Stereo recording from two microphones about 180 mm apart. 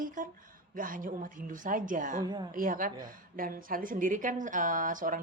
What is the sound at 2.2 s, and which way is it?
Speech, 25° right (ahead or behind).